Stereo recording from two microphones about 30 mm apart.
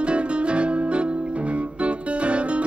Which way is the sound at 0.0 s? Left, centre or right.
Right.